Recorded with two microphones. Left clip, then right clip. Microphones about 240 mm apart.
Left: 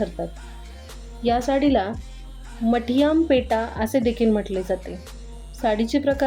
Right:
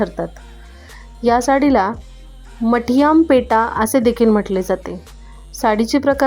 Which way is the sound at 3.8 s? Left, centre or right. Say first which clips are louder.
Right 7 dB; right.